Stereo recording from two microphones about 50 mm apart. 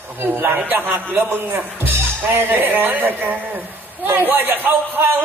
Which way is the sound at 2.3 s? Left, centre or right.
Right.